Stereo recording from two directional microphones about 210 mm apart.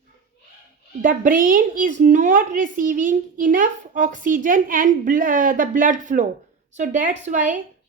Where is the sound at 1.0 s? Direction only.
40° right (ahead or behind).